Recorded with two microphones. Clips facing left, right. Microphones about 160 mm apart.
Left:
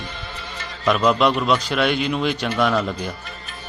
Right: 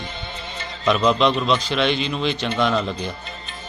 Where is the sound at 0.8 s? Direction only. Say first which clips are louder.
Even; 5° left (ahead or behind).